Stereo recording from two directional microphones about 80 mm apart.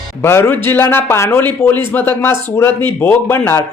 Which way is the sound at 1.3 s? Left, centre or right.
Left.